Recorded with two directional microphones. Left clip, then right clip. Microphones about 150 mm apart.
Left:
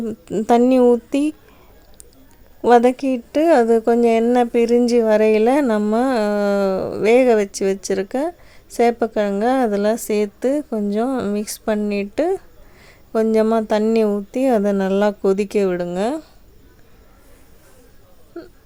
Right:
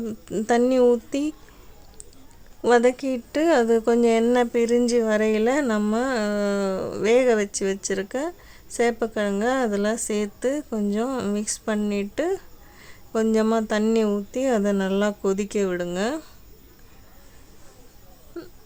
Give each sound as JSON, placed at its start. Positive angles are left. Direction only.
{"t": 0.0, "sound": "a woman's voice", "side_deg": 20}
{"t": 2.6, "sound": "a woman's voice", "side_deg": 20}
{"t": 18.3, "sound": "a sound", "side_deg": 5}